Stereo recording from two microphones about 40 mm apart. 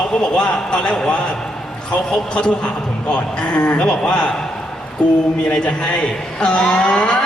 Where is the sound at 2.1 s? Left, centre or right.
Left.